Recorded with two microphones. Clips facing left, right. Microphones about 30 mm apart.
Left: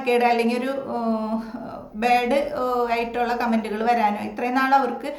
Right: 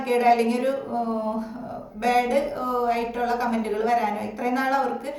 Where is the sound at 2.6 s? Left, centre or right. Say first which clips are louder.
Left 1 dB; left.